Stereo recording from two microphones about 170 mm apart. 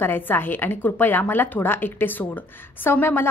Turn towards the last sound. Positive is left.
turn(degrees=15)  # may be behind; listen again after turning